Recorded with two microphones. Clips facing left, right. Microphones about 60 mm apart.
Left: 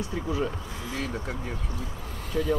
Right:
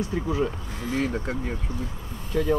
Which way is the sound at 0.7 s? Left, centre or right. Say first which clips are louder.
Right 10 dB; right.